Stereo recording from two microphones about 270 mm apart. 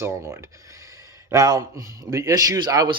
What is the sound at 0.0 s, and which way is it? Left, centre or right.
Speech, centre.